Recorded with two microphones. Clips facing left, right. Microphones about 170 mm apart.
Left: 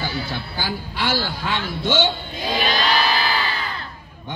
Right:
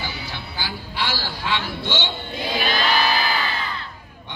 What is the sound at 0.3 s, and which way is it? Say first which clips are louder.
A woman's voice: left 4 dB; 50° left (ahead or behind).